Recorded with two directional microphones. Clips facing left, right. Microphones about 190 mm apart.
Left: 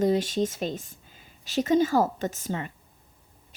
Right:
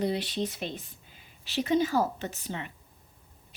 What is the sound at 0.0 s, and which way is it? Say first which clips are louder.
Speech: left 6 dB; 45° left (ahead or behind).